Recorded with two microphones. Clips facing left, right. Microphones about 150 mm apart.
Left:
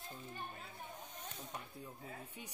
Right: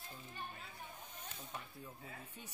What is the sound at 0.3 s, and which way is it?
Music, 45° left (ahead or behind).